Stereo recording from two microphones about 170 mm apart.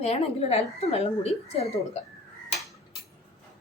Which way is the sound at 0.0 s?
35° left (ahead or behind).